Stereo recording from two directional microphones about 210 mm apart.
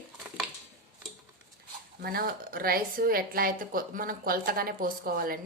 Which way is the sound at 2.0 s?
45° right (ahead or behind).